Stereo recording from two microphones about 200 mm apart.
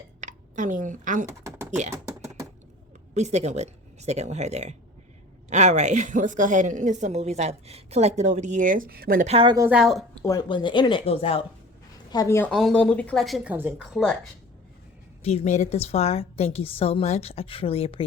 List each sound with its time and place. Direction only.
0.2 s a woman's voice: 40° right (ahead or behind)
1.3 s typing: 15° right (ahead or behind)
2.0 s a sound: 15° right (ahead or behind)
3.2 s a woman's voice: 35° right (ahead or behind)
9.2 s a woman's voice: 30° right (ahead or behind)
9.6 s speech: 5° right (ahead or behind)
10.2 s speech: 20° left (ahead or behind)
12.1 s speech: 15° left (ahead or behind)
12.5 s speech: centre (ahead or behind)
15.2 s a woman's voice: 30° left (ahead or behind)